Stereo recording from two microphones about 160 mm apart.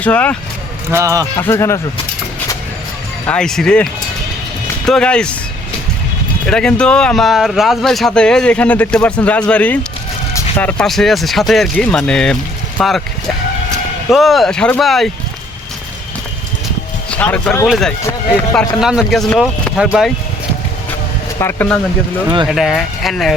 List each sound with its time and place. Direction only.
0.0 s speech: 10° left (ahead or behind)
0.9 s speech: 15° right (ahead or behind)
1.4 s speech: 15° left (ahead or behind)
3.2 s speech: 5° left (ahead or behind)
4.9 s speech: 5° left (ahead or behind)
6.5 s speech: 5° left (ahead or behind)
17.1 s speech: 10° left (ahead or behind)
21.3 s speech: 15° left (ahead or behind)
22.4 s speech: centre (ahead or behind)